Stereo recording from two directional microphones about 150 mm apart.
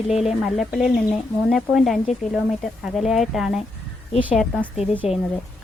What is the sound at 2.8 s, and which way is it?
Speech, centre (ahead or behind).